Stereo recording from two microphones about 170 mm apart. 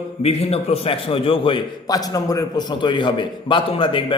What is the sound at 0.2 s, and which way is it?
A man's voice, 35° left (ahead or behind).